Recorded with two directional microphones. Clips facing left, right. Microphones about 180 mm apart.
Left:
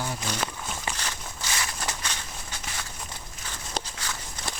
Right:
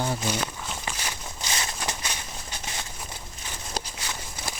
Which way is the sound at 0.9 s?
15° right (ahead or behind).